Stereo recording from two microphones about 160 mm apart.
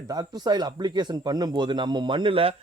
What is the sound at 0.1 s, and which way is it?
Speech, 25° right (ahead or behind).